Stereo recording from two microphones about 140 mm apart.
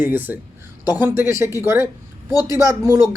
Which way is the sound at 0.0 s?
15° right (ahead or behind).